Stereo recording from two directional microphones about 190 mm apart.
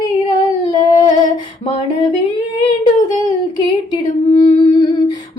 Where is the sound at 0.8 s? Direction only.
20° left (ahead or behind).